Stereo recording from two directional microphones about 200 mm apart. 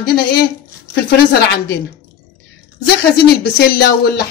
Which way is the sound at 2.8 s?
50° left (ahead or behind).